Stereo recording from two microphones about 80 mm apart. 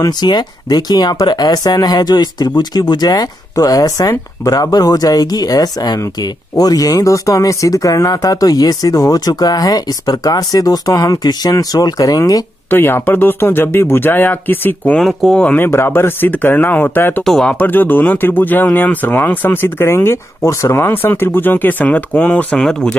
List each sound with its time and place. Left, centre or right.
0.2 s speech: left
12.6 s speech: left
15.0 s speech: centre; by 17.2 s left
17.2 s speech: centre
17.5 s speech: left
22.6 s speech: centre